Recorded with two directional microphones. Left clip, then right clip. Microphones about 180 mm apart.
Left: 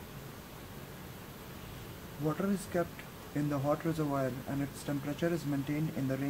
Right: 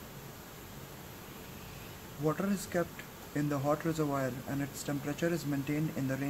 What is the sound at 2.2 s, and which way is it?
Speech, 15° right (ahead or behind).